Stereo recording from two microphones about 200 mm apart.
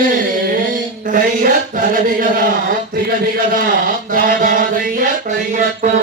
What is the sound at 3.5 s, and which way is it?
Chant, 45° right (ahead or behind).